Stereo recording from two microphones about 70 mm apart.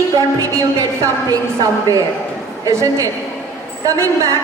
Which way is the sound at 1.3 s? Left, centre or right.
Right.